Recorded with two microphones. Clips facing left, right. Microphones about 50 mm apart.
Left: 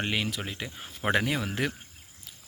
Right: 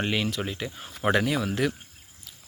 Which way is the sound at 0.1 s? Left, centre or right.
Centre.